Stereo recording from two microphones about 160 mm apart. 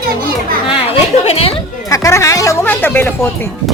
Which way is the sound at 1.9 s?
20° left (ahead or behind).